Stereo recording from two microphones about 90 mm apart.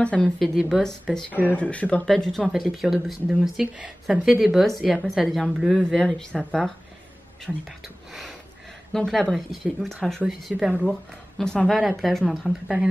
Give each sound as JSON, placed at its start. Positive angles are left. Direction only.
{"t": 0.0, "sound": "speech", "side_deg": 10}
{"t": 0.4, "sound": "speech", "side_deg": 0}
{"t": 1.5, "sound": "speech", "side_deg": 15}
{"t": 2.0, "sound": "speech", "side_deg": 5}
{"t": 8.9, "sound": "speech", "side_deg": 5}